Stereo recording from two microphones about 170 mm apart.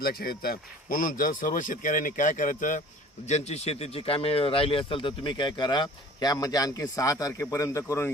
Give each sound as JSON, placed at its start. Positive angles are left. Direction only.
{"t": 0.0, "sound": "speech", "side_deg": 65}
{"t": 3.2, "sound": "speech", "side_deg": 40}